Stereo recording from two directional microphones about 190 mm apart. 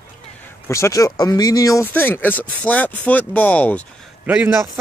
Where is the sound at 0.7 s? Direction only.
15° left (ahead or behind).